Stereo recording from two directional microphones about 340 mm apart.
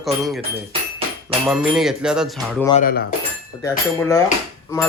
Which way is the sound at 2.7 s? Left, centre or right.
Left.